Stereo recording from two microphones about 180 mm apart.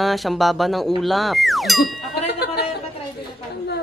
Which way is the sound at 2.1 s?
65° left (ahead or behind).